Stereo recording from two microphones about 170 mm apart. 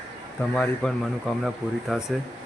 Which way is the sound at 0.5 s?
5° left (ahead or behind).